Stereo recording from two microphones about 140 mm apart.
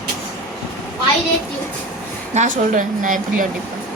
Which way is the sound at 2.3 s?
60° right (ahead or behind).